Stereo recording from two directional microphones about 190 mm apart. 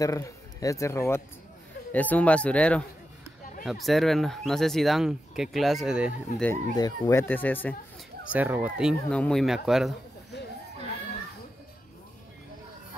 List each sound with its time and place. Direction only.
0.0 s a man's voice: 15° left (ahead or behind); by 6.1 s 5° right (ahead or behind)
6.4 s speech: 15° left (ahead or behind)
8.3 s speech: 10° right (ahead or behind)